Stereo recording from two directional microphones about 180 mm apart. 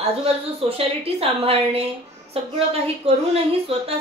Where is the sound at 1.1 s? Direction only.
35° right (ahead or behind).